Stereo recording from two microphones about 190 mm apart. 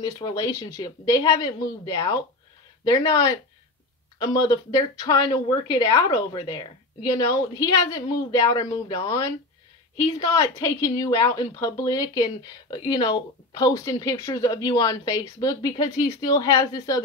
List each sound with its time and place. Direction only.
0.0 s a woman's voice: 20° left (ahead or behind)